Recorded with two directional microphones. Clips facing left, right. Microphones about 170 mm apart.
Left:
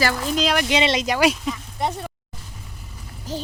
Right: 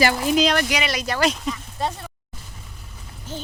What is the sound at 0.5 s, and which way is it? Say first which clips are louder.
Speech: left 3 dB; 15° left (ahead or behind).